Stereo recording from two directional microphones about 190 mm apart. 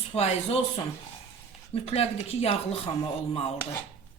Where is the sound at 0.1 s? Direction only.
35° left (ahead or behind).